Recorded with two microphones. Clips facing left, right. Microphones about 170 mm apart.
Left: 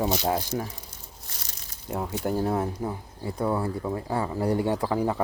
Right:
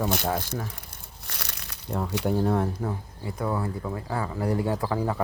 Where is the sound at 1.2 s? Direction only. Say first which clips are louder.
Right 10 dB; 70° right (ahead or behind).